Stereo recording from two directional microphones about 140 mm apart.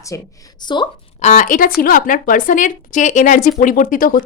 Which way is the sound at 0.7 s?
35° left (ahead or behind).